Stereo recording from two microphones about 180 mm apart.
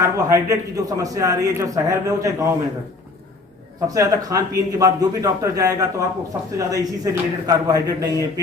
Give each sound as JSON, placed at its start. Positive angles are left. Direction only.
{"t": 0.0, "sound": "a man's voice", "side_deg": -15}
{"t": 3.8, "sound": "a man's voice", "side_deg": -20}